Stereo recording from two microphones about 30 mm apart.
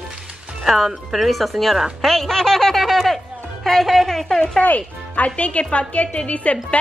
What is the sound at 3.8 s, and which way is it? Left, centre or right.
Speech, centre.